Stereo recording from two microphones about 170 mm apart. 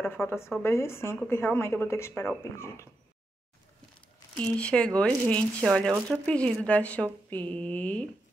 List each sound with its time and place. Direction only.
0.1 s speech: 15° left (ahead or behind)
4.4 s speech: 5° left (ahead or behind)